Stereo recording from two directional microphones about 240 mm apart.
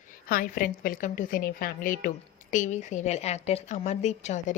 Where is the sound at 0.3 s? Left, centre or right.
Left.